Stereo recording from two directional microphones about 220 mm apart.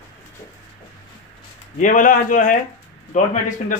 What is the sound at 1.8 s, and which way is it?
Speech, 35° left (ahead or behind).